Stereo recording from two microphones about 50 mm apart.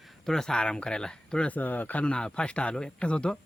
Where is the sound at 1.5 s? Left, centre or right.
Left.